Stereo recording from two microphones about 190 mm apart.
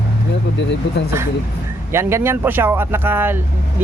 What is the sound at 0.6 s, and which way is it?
Speech, 65° left (ahead or behind).